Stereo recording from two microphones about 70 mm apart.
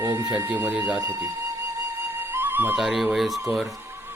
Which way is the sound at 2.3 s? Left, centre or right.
Right.